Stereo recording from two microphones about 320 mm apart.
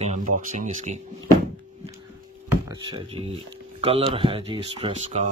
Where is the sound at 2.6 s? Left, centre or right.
Centre.